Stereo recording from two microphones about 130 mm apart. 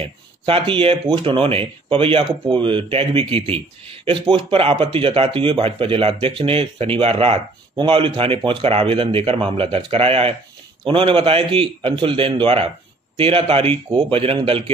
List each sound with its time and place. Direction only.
0.0 s speech: 45° right (ahead or behind)